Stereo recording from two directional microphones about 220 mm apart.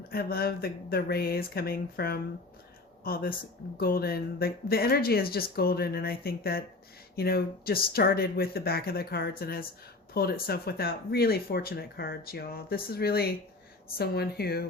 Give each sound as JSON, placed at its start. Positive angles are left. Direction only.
{"t": 0.1, "sound": "speech", "side_deg": 45}